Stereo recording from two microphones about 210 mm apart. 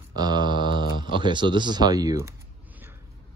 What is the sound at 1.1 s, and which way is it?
Speech, 20° right (ahead or behind).